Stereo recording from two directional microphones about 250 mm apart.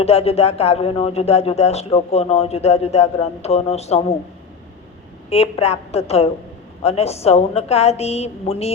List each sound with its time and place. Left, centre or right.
0.0 s speech: left
5.3 s speech: left